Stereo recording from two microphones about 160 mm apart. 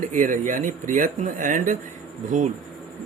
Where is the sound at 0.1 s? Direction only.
55° right (ahead or behind).